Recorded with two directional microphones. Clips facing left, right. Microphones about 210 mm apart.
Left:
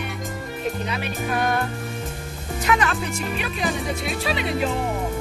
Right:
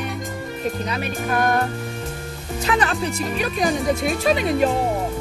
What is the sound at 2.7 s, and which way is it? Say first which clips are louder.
Music: right 1 dB; 35° right (ahead or behind).